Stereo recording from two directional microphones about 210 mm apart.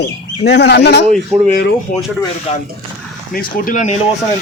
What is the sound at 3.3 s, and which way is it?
Speech, 40° left (ahead or behind).